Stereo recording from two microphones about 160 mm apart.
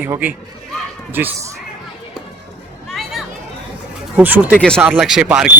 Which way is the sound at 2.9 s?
Centre (ahead or behind).